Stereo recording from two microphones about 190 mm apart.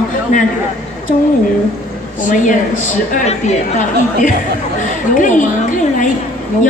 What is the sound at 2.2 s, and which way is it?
A woman's voice, 40° left (ahead or behind).